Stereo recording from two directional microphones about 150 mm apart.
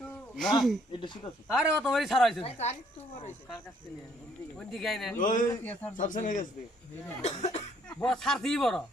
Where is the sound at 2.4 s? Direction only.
45° left (ahead or behind).